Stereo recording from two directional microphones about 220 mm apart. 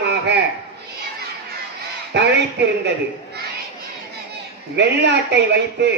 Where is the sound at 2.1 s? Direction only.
50° right (ahead or behind).